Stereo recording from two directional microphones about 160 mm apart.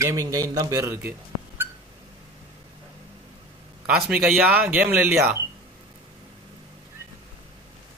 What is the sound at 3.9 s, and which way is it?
Speech, 5° right (ahead or behind).